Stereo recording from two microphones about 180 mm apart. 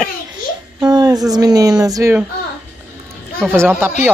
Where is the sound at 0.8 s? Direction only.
20° right (ahead or behind).